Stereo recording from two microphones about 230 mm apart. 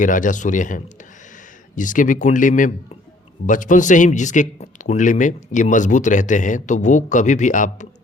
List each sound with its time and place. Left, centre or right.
0.0 s a man's voice: left